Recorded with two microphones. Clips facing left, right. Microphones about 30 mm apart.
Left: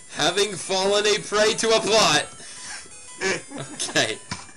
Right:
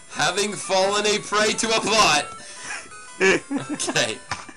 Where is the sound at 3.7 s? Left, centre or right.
Centre.